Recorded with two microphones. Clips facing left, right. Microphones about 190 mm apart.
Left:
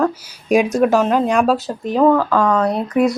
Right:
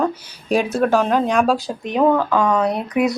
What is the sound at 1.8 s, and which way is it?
Speech, 15° right (ahead or behind).